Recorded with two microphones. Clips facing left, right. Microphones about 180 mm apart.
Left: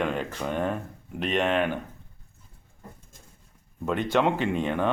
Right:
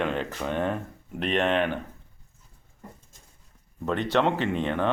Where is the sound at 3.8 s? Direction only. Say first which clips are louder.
Even; 5° left (ahead or behind).